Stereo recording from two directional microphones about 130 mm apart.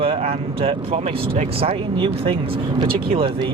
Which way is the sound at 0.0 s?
50° right (ahead or behind).